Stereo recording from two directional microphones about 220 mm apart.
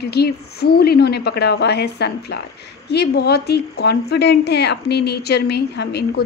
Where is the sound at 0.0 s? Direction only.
45° left (ahead or behind).